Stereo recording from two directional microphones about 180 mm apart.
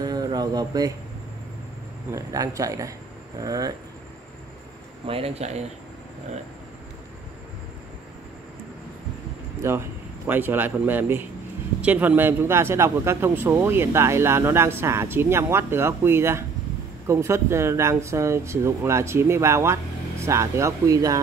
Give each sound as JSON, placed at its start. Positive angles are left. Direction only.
{"t": 0.0, "sound": "a sound", "side_deg": -20}
{"t": 2.1, "sound": "a man's voice", "side_deg": -20}
{"t": 5.0, "sound": "speech", "side_deg": -30}
{"t": 9.6, "sound": "a man's voice", "side_deg": -15}